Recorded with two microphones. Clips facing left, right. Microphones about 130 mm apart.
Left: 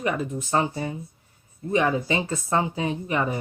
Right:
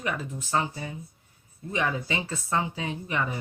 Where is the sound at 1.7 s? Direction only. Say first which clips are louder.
Left 6 dB; 30° left (ahead or behind).